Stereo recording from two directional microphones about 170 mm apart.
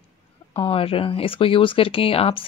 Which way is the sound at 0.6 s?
35° left (ahead or behind).